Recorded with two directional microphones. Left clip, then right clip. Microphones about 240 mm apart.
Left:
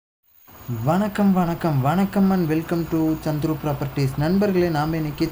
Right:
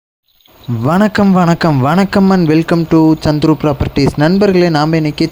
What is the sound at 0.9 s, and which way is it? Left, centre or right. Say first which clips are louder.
A man's voice: right 10 dB; right.